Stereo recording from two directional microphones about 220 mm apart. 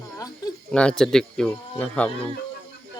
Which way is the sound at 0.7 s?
5° left (ahead or behind).